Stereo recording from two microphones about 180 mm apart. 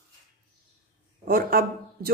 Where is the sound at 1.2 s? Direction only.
55° right (ahead or behind).